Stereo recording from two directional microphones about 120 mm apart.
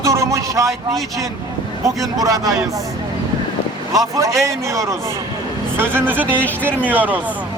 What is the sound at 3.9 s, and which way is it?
A man's voice, 25° right (ahead or behind).